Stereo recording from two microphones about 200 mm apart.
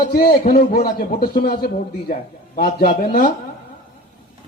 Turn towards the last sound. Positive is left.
turn(degrees=45)  # may be behind; listen again after turning